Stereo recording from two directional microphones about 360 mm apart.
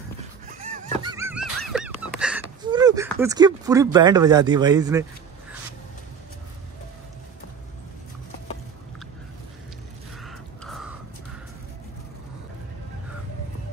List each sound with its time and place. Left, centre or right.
1.0 s a sound: centre
2.1 s speech: centre
10.2 s gasp: centre